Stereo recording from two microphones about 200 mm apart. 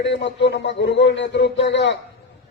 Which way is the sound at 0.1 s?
60° left (ahead or behind).